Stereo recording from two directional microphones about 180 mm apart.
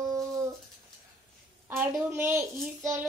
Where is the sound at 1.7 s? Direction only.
15° right (ahead or behind).